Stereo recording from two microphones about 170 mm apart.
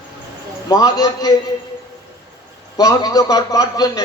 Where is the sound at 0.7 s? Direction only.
20° left (ahead or behind).